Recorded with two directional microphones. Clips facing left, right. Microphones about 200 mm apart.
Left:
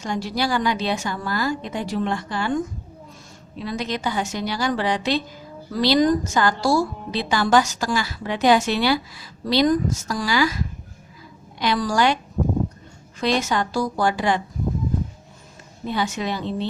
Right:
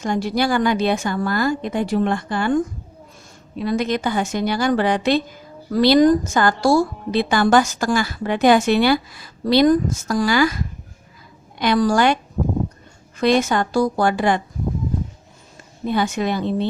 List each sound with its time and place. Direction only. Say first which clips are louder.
0.0 s a woman's voice: right 4 dB; 50° right (ahead or behind)
3.6 s a woman's voice: right 6 dB; 50° right (ahead or behind)
11.6 s a woman's voice: right 4 dB; 50° right (ahead or behind)
15.9 s a woman's voice: right 4 dB; 50° right (ahead or behind)